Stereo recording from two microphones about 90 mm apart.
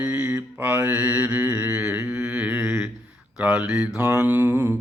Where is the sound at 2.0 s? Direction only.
25° right (ahead or behind); by 4.0 s 10° right (ahead or behind).